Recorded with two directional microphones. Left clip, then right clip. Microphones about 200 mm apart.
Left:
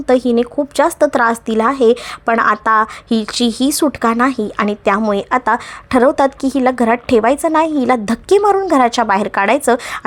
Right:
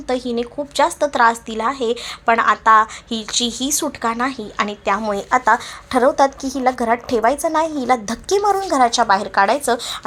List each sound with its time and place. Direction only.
0.1 s a woman's voice: 50° left (ahead or behind)